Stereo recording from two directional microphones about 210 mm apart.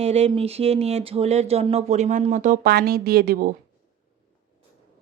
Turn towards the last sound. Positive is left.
turn(degrees=-45)  # may be behind; listen again after turning